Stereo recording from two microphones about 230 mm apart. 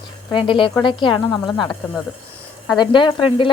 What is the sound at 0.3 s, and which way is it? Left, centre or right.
Speech, left.